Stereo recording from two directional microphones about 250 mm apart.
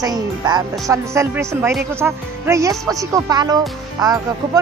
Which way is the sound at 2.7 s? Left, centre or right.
Centre.